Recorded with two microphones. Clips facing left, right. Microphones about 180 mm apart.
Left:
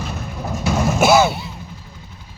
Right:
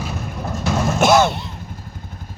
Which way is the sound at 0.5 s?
5° left (ahead or behind).